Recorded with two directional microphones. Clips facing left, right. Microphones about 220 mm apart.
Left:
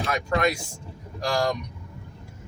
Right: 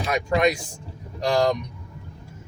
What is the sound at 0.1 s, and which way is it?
Speech, 20° right (ahead or behind).